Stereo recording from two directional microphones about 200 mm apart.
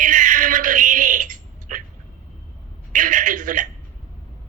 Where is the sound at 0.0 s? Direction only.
40° right (ahead or behind).